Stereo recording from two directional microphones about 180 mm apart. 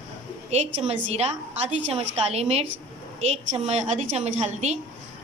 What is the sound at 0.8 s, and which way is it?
A woman's voice, 35° right (ahead or behind).